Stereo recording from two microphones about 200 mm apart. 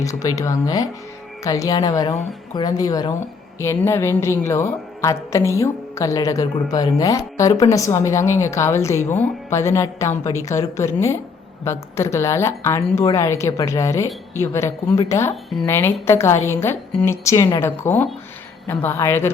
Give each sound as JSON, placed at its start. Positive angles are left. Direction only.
{"t": 0.0, "sound": "a woman's voice", "side_deg": 15}